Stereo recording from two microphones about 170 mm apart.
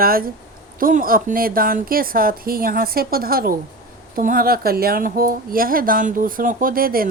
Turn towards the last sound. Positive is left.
turn(degrees=-60)  # may be behind; listen again after turning